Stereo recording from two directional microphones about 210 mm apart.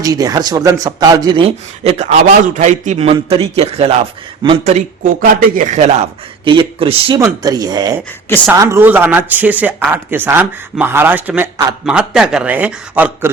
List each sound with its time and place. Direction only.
0.0 s a man's voice: 15° right (ahead or behind)